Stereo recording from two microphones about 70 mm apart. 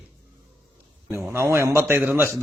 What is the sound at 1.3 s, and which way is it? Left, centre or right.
Speech, right.